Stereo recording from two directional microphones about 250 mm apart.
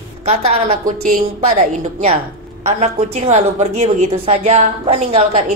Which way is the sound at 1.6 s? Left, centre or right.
Right.